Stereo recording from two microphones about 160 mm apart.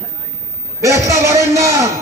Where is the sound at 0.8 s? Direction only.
20° right (ahead or behind).